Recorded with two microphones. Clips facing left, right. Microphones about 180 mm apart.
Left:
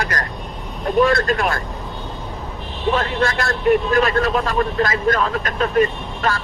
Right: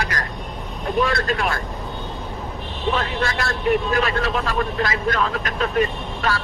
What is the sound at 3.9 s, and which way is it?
Speech, 45° left (ahead or behind).